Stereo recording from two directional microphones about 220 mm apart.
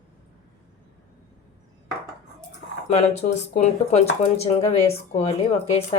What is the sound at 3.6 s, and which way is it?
Speech, 30° left (ahead or behind).